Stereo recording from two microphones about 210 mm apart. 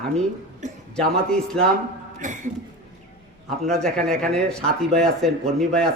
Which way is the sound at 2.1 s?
35° right (ahead or behind).